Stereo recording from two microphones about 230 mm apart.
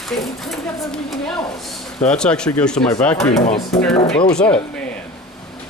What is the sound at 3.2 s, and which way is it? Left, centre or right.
Chopping, left.